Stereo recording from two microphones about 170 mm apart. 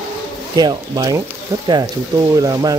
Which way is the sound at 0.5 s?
25° right (ahead or behind).